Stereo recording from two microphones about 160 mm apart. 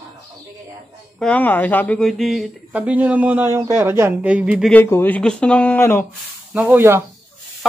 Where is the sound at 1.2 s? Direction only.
10° left (ahead or behind); by 4.6 s 5° right (ahead or behind).